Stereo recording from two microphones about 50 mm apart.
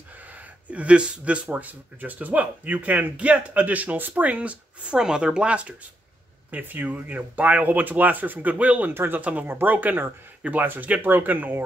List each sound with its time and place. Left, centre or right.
0.7 s speech: right
4.9 s speech: centre
6.5 s speech: right
8.9 s speech: right
9.2 s speech: right